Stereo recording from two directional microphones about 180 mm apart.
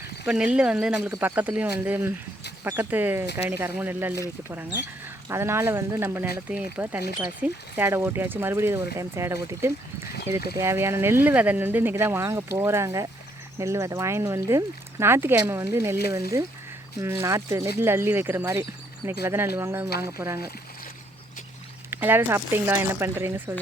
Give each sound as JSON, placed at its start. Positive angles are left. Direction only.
{"t": 0.3, "sound": "speech", "side_deg": -5}
{"t": 17.0, "sound": "speech", "side_deg": -15}
{"t": 21.8, "sound": "speech", "side_deg": -10}